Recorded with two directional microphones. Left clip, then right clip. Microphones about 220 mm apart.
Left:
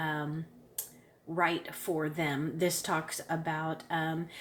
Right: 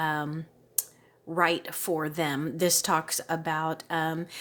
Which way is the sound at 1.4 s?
45° right (ahead or behind).